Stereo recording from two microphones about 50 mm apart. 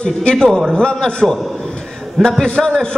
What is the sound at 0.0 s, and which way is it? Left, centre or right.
Speech, left.